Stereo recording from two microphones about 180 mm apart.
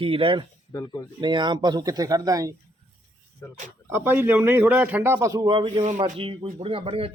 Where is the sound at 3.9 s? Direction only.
10° right (ahead or behind).